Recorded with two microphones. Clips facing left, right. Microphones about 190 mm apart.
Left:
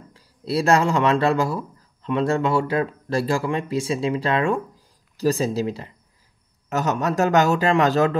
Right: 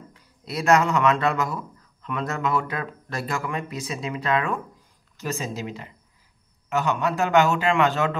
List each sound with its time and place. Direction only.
0.1 s a man's voice: 30° left (ahead or behind)